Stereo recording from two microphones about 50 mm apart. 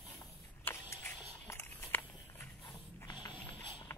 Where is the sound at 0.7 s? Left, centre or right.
Left.